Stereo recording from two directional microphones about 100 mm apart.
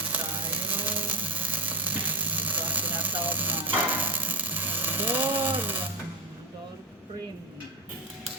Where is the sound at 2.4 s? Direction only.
15° right (ahead or behind).